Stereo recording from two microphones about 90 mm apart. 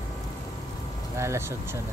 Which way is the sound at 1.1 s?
30° right (ahead or behind).